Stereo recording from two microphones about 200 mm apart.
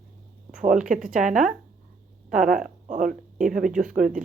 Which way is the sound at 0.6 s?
40° right (ahead or behind).